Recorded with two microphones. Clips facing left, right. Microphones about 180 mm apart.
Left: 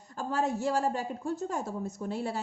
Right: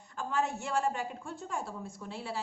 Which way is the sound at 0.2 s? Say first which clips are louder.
Left 3 dB; 40° left (ahead or behind).